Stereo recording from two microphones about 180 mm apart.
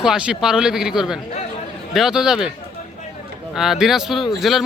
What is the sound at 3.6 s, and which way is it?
Speech, 5° right (ahead or behind).